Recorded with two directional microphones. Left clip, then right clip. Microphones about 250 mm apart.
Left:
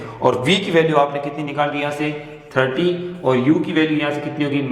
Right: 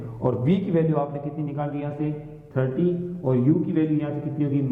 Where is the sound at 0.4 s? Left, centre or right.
Centre.